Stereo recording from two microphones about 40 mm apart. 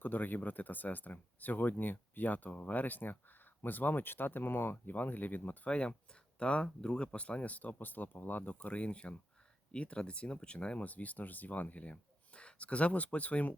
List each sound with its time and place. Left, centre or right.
0.0 s speech: left
4.9 s speech: left
5.6 s speech: left
10.8 s speech: left